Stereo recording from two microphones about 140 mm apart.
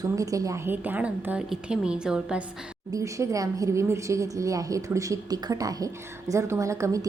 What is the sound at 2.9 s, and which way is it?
A woman's voice, 25° right (ahead or behind).